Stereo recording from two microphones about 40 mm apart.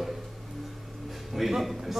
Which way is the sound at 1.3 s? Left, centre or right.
Centre.